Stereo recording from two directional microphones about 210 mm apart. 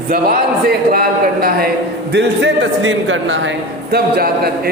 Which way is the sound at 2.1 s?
55° right (ahead or behind).